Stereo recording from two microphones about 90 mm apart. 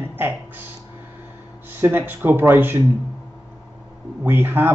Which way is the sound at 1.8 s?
25° right (ahead or behind).